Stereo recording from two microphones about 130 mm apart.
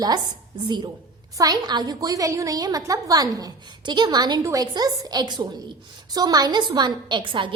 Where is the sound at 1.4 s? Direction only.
30° right (ahead or behind).